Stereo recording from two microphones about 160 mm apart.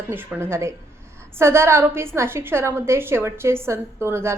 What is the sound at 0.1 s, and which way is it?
A woman's voice, 15° right (ahead or behind).